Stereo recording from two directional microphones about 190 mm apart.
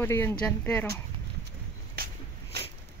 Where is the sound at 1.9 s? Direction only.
55° right (ahead or behind).